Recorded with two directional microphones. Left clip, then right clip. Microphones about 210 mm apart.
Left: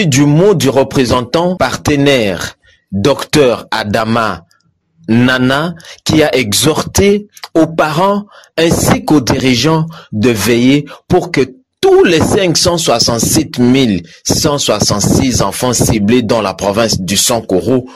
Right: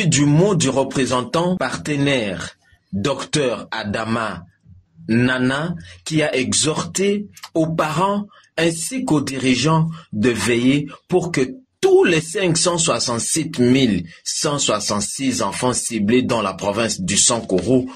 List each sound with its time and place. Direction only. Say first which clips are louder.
0.0 s speech: left 8 dB; 40° left (ahead or behind)